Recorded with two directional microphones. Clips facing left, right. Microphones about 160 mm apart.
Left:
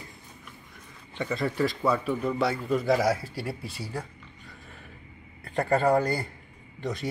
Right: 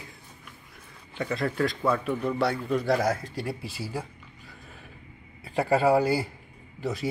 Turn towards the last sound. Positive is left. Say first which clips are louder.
# right 1 dB
turn(degrees=-5)  # may be behind; listen again after turning